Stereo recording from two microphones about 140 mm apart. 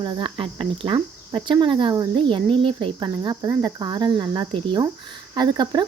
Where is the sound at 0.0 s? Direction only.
35° right (ahead or behind).